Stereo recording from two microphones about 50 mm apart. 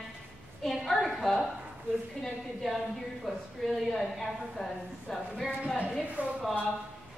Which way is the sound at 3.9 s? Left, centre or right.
Centre.